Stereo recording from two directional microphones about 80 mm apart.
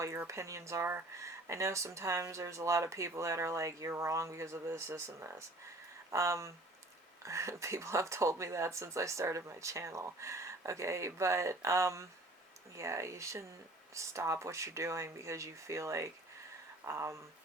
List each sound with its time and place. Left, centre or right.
0.0 s speech: right